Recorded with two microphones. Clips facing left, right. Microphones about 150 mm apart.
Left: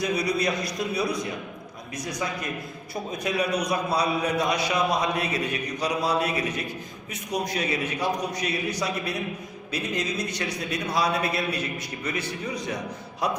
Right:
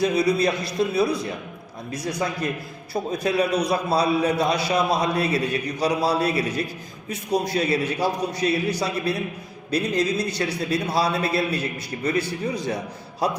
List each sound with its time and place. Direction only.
0.0 s a man's voice: 30° right (ahead or behind)